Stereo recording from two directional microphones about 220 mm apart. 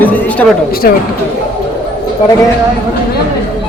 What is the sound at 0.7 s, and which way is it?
Speech, 45° left (ahead or behind).